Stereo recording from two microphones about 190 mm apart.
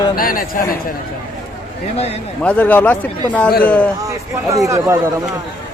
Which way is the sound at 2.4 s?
5° left (ahead or behind).